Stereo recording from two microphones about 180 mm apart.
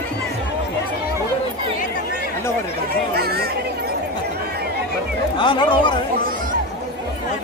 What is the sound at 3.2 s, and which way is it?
Chatter, 60° right (ahead or behind).